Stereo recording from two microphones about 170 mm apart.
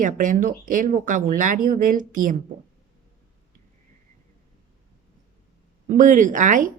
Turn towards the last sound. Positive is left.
turn(degrees=-50)  # may be behind; listen again after turning